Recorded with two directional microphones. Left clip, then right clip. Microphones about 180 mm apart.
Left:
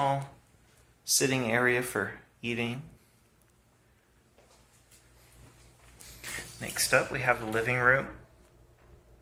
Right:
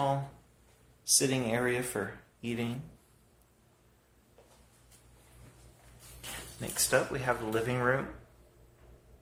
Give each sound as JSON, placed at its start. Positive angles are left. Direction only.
{"t": 1.0, "sound": "speech", "side_deg": 0}
{"t": 6.2, "sound": "a sound", "side_deg": -25}
{"t": 6.6, "sound": "speech", "side_deg": -15}